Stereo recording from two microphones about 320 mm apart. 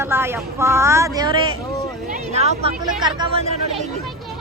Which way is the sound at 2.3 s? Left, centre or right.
Centre.